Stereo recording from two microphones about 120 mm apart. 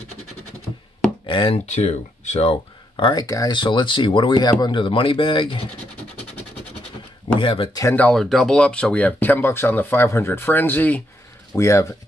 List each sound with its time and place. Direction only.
1.2 s speech: 45° left (ahead or behind)
1.7 s speech: 65° left (ahead or behind)
3.0 s speech: 40° left (ahead or behind)
7.3 s speech: 45° left (ahead or behind)
7.9 s speech: 15° left (ahead or behind)
8.2 s speech: centre (ahead or behind); by 11.9 s 25° left (ahead or behind)